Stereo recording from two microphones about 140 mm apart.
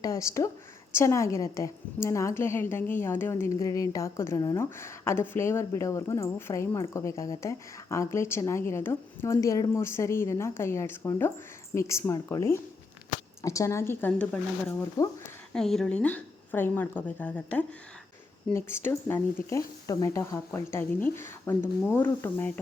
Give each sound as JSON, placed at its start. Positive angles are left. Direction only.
{"t": 0.0, "sound": "a woman's voice", "side_deg": 20}
{"t": 15.5, "sound": "speech", "side_deg": 5}